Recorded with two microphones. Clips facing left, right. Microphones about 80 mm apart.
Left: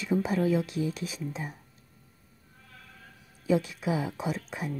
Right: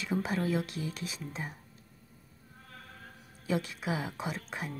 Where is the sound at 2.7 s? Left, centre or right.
Right.